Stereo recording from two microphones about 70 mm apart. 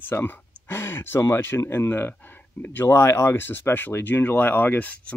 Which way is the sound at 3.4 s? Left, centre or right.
Left.